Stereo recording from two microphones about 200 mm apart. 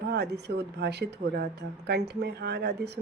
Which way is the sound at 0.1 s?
55° right (ahead or behind).